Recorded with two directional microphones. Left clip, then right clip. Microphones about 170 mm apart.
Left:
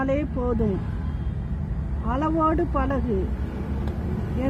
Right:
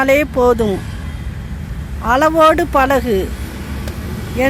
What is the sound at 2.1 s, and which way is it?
Speech, 50° right (ahead or behind).